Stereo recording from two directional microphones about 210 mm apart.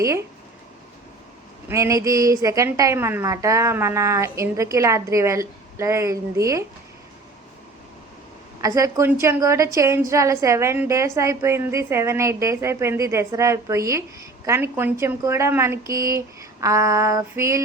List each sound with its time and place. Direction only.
0.0 s a woman's voice: 15° right (ahead or behind)
1.6 s a woman's voice: 15° right (ahead or behind)
8.6 s a woman's voice: 15° right (ahead or behind)